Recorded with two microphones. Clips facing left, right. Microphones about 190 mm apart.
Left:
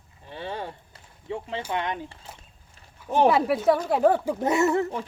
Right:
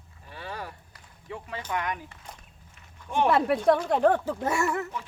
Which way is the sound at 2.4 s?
35° left (ahead or behind).